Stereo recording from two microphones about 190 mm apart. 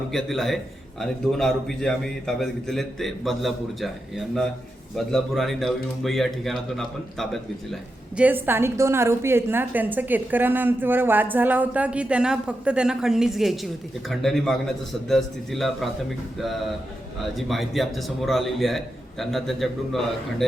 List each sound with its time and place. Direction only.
0.1 s a man's voice: centre (ahead or behind)
17.3 s a man's voice: centre (ahead or behind)